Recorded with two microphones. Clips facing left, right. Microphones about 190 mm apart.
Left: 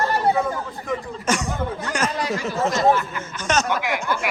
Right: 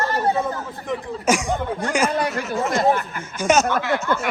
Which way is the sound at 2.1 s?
55° right (ahead or behind).